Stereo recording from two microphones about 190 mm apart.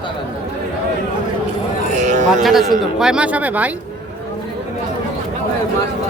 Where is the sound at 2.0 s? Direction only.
40° right (ahead or behind).